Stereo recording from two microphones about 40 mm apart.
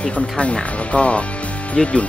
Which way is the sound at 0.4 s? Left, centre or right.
Left.